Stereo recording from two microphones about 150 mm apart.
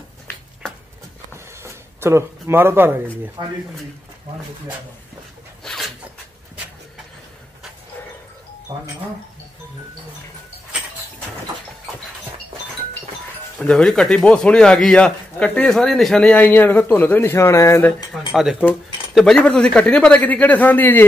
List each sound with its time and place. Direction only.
1.6 s a sound: 15° right (ahead or behind)
3.4 s speech: 30° right (ahead or behind)
5.6 s dog: 5° left (ahead or behind)
13.6 s speech: 5° left (ahead or behind)
18.3 s speech: 5° right (ahead or behind); by 21.0 s 10° left (ahead or behind)